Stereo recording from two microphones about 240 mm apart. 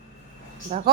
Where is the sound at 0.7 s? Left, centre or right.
Right.